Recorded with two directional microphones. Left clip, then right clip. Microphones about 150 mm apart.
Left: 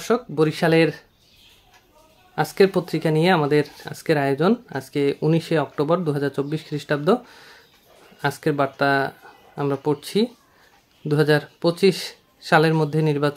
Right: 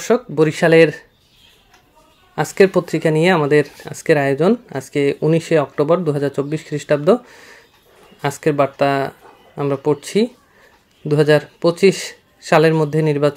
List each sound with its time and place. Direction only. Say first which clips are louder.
0.0 s speech: right 5 dB; 20° right (ahead or behind)
2.3 s speech: right 4 dB; 20° right (ahead or behind)